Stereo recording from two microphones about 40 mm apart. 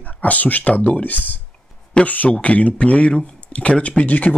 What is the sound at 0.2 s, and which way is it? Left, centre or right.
Speech, left.